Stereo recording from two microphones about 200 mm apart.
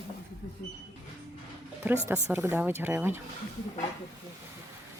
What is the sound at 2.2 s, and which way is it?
Speech, 15° right (ahead or behind).